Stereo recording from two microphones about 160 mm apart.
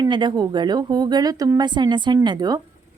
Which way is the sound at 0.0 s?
30° right (ahead or behind).